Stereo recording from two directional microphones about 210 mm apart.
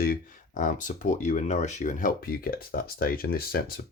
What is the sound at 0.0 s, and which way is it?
Speech, 40° left (ahead or behind).